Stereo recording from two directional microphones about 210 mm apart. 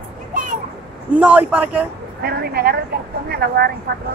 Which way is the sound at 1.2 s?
5° right (ahead or behind).